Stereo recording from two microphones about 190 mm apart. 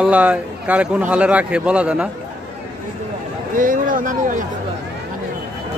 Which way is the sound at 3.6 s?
45° right (ahead or behind).